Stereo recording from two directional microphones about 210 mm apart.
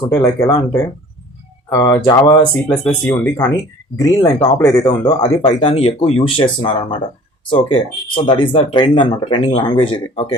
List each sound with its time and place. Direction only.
0.0 s speech: 15° left (ahead or behind)
5.2 s speech: 30° left (ahead or behind)